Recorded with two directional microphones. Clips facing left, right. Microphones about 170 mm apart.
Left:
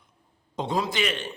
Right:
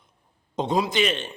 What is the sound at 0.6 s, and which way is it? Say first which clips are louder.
Speech: right 4 dB; 20° right (ahead or behind).